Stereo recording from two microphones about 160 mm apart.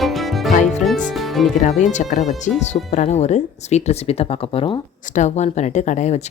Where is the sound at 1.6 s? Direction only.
50° left (ahead or behind).